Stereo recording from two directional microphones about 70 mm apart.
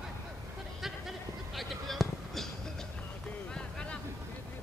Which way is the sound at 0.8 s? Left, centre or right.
Centre.